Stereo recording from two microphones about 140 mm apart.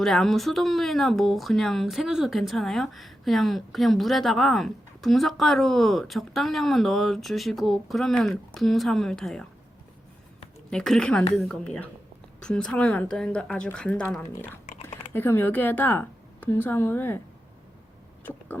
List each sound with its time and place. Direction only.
0.0 s speech: centre (ahead or behind)
10.7 s a woman's voice: 5° left (ahead or behind)
18.2 s vehicle: 15° left (ahead or behind)